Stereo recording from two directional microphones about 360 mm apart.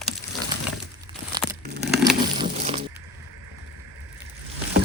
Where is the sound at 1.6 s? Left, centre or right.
Right.